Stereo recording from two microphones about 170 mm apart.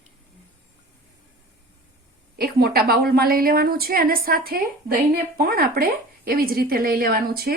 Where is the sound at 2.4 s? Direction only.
65° right (ahead or behind).